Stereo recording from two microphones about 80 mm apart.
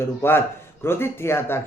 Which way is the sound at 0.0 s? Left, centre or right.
Left.